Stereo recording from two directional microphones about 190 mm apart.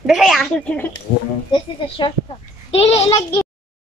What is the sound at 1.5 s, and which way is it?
A woman's voice, 25° left (ahead or behind).